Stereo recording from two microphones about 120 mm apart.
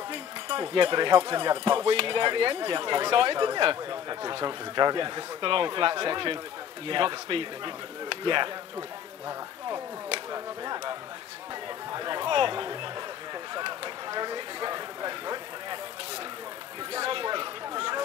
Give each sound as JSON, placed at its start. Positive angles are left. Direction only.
{"t": 0.1, "sound": "speech", "side_deg": -40}
{"t": 10.3, "sound": "a sound", "side_deg": -35}
{"t": 16.9, "sound": "chatter", "side_deg": -45}